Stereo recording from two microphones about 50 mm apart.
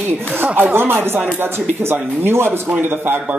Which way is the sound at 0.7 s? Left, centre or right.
Right.